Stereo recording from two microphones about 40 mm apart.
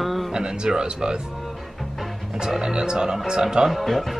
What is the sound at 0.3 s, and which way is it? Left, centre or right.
Speech, centre.